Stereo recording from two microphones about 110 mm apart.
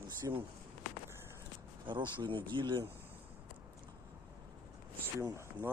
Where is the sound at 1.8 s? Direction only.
45° right (ahead or behind).